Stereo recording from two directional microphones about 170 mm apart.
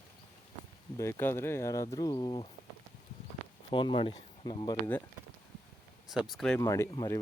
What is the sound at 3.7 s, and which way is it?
Speech, 30° left (ahead or behind).